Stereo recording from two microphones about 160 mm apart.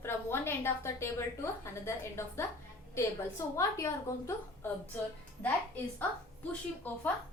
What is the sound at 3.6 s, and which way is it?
A woman's voice, 20° left (ahead or behind).